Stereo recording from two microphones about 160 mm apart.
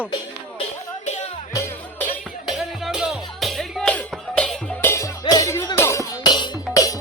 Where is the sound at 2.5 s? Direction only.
Centre (ahead or behind).